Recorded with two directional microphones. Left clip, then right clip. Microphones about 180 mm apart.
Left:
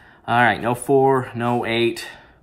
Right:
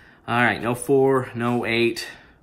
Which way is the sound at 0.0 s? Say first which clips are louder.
Left 4 dB; 10° left (ahead or behind).